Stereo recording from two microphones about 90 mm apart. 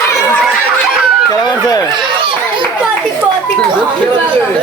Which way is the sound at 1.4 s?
45° left (ahead or behind).